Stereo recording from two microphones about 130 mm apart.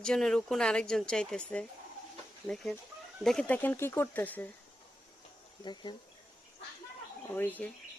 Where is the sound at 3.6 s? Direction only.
15° left (ahead or behind).